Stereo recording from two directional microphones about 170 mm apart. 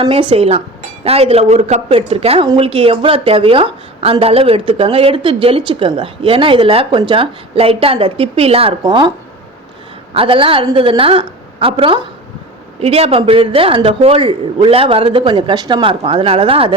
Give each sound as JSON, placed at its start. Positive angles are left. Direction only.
{"t": 0.0, "sound": "a woman's voice", "side_deg": -30}
{"t": 10.2, "sound": "a woman's voice", "side_deg": -30}